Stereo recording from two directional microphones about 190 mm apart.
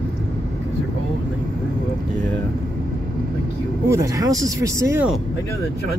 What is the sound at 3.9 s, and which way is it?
Speech, 15° right (ahead or behind).